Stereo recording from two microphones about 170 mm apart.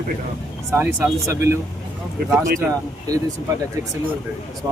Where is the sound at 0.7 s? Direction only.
15° right (ahead or behind).